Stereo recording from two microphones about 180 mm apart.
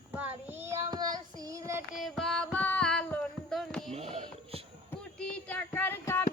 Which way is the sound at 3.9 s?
35° right (ahead or behind).